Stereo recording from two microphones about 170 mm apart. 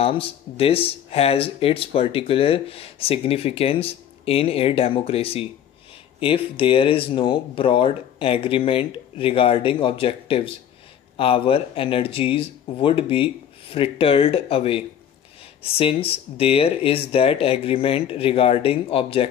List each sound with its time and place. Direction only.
0.0 s speech: 35° left (ahead or behind)